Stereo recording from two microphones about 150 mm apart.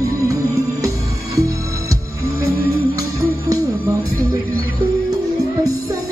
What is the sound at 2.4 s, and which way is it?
Music, 20° right (ahead or behind).